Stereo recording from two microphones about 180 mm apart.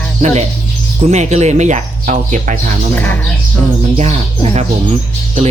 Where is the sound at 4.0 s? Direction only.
35° right (ahead or behind).